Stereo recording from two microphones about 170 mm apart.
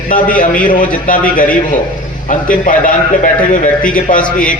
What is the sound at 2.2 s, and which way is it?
A man's voice, 50° left (ahead or behind).